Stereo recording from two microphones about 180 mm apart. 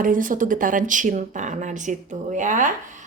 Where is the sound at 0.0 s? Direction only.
50° right (ahead or behind).